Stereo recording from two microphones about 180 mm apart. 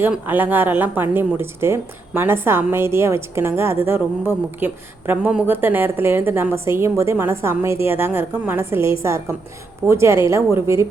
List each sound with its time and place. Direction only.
0.0 s speech: 10° right (ahead or behind)